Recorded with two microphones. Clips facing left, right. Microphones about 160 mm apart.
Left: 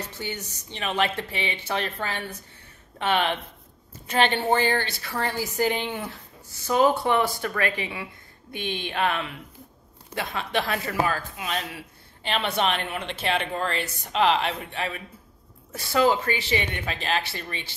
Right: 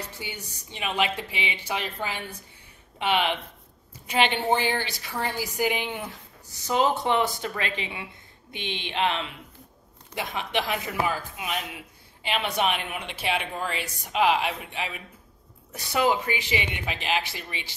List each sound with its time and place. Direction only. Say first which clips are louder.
0.2 s speech: left 4 dB; 10° right (ahead or behind)